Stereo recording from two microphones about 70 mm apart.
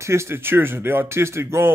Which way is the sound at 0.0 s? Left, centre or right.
Right.